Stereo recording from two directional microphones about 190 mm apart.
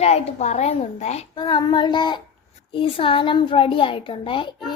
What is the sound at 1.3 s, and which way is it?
A child's voice, 20° left (ahead or behind).